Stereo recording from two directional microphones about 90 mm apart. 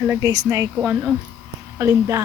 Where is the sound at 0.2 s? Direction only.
40° right (ahead or behind).